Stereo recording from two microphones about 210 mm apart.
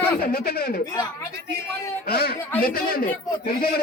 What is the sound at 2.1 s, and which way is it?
Speech, 50° left (ahead or behind).